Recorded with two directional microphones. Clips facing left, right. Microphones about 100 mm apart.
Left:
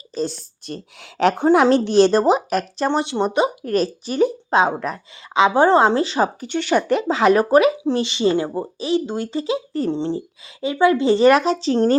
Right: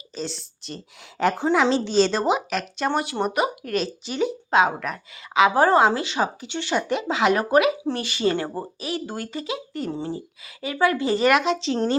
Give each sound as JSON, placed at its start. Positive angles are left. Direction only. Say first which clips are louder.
{"t": 0.1, "sound": "a woman's voice", "louder": "left 7 dB", "side_deg": 45}
{"t": 2.1, "sound": "speech", "louder": "left 6 dB", "side_deg": 40}
{"t": 7.1, "sound": "speech", "louder": "left 5 dB", "side_deg": 35}
{"t": 7.9, "sound": "speech", "louder": "left 5 dB", "side_deg": 25}